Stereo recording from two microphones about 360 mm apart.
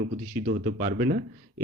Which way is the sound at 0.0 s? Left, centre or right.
Right.